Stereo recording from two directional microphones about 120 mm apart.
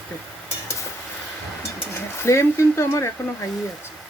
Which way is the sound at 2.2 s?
25° left (ahead or behind).